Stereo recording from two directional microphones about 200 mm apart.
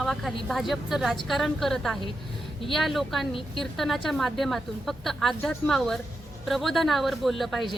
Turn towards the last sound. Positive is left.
turn(degrees=0)  # may be behind; listen again after turning